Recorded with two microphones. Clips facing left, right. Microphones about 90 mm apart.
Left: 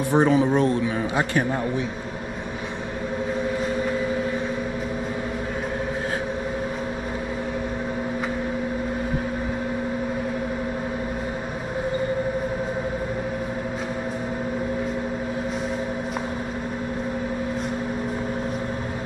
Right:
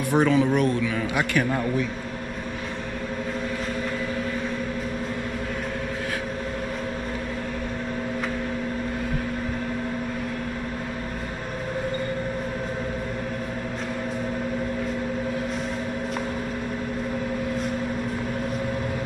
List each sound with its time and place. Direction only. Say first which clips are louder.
0.2 s a man's voice: left 1 dB; 20° left (ahead or behind)